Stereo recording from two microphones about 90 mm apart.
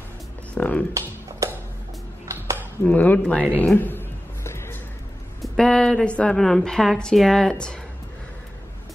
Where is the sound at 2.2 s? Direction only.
30° right (ahead or behind).